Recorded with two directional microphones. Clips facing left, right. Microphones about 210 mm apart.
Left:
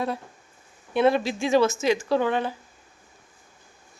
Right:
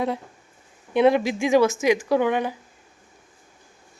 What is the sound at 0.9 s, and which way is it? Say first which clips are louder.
Speech: right 3 dB; 15° right (ahead or behind).